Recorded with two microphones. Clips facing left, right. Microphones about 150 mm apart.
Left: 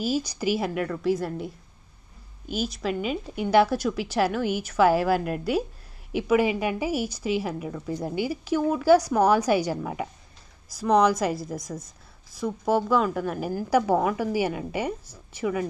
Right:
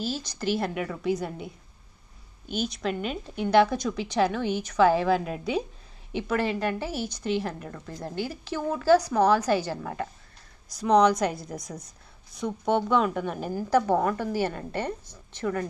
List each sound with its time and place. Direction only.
0.0 s a woman's voice: 10° left (ahead or behind)